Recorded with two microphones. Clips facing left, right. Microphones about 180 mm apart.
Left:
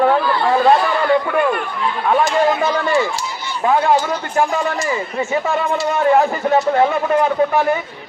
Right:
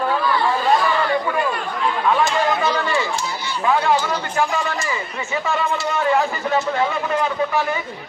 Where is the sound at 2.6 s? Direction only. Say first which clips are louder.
Left 4 dB; 50° left (ahead or behind).